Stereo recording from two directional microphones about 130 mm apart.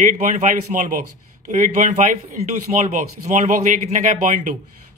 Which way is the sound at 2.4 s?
55° right (ahead or behind).